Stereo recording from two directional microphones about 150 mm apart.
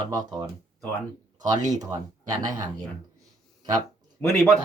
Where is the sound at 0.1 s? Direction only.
25° right (ahead or behind).